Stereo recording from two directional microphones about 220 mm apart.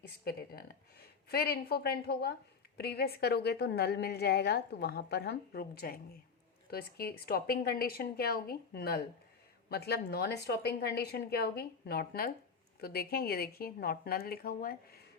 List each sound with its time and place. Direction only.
0.3 s a woman's voice: 45° left (ahead or behind)